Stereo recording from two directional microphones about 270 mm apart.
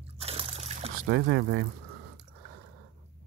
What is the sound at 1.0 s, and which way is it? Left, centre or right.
Speech, right.